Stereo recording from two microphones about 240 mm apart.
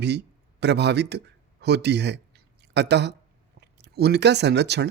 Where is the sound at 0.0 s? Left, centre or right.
Right.